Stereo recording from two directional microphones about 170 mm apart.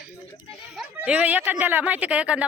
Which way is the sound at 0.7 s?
5° right (ahead or behind).